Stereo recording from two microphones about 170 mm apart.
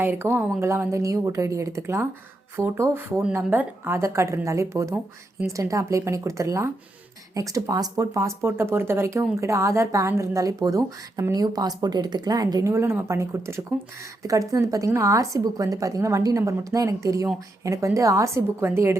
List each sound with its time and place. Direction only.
0.0 s a woman's voice: 15° right (ahead or behind)